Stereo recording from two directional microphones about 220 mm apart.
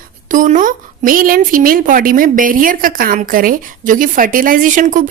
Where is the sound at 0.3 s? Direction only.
35° right (ahead or behind).